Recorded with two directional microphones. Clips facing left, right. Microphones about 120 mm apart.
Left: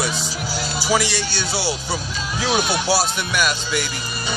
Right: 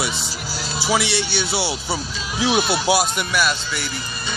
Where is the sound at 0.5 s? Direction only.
Centre (ahead or behind).